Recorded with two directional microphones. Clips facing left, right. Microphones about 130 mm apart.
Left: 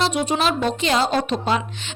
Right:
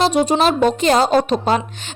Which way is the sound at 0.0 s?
40° right (ahead or behind).